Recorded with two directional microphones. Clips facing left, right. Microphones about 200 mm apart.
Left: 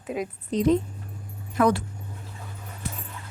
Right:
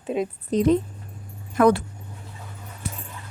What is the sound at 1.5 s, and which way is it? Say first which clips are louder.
Speech: right 4 dB; 55° right (ahead or behind).